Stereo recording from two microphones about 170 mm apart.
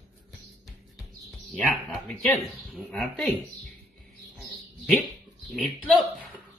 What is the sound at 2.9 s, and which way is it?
Speech, centre (ahead or behind).